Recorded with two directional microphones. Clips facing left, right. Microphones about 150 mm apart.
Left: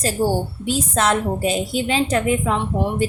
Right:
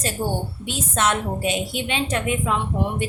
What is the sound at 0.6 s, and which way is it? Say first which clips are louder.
A woman's voice: left 2 dB; 35° left (ahead or behind).